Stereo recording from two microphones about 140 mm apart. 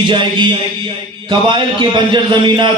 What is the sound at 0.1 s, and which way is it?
A man's voice, 35° right (ahead or behind).